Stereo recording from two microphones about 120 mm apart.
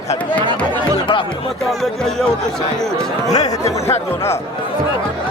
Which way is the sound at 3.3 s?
30° left (ahead or behind).